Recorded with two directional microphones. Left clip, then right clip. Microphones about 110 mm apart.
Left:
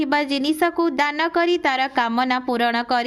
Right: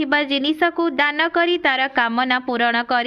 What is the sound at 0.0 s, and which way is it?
A woman's voice, 25° left (ahead or behind).